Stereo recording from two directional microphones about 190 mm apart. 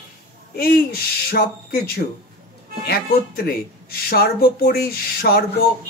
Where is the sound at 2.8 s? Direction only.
55° left (ahead or behind).